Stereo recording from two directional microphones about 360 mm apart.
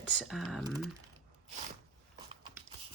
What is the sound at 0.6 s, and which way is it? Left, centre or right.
Speech, centre.